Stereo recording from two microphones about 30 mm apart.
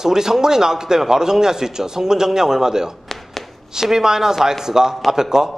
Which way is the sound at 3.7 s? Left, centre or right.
Centre.